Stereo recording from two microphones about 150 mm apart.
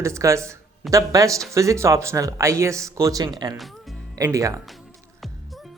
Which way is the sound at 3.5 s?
Centre (ahead or behind).